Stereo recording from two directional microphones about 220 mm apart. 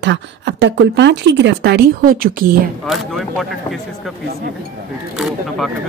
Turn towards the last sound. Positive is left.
turn(degrees=0)  # may be behind; listen again after turning